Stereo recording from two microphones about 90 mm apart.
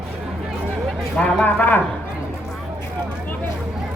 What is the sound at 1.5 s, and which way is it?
Speech, 20° left (ahead or behind).